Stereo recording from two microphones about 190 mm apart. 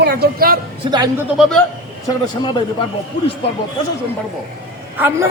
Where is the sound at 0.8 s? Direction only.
25° right (ahead or behind).